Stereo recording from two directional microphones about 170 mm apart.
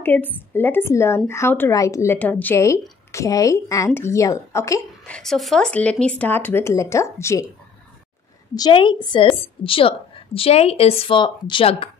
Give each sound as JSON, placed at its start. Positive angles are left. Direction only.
{"t": 0.0, "sound": "speech", "side_deg": 10}
{"t": 5.0, "sound": "speech", "side_deg": 5}
{"t": 8.5, "sound": "a woman's voice", "side_deg": 25}